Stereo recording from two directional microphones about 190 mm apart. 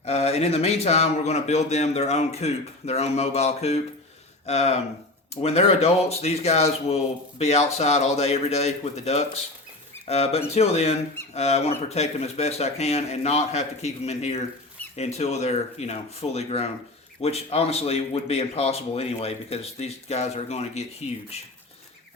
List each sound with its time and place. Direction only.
0.0 s a man's voice: 35° left (ahead or behind)